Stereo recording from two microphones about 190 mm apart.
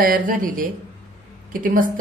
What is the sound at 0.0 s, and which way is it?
A woman's voice, 45° right (ahead or behind).